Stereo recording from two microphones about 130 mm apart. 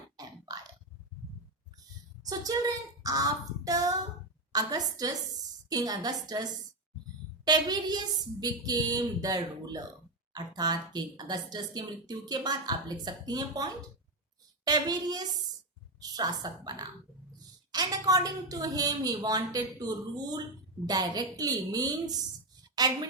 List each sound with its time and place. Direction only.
0.2 s a sound: 30° right (ahead or behind)
2.2 s child singing: 30° right (ahead or behind)
4.5 s a woman's voice: 30° right (ahead or behind)
7.4 s a woman's voice: 30° right (ahead or behind)
20.8 s a woman's voice: 30° right (ahead or behind)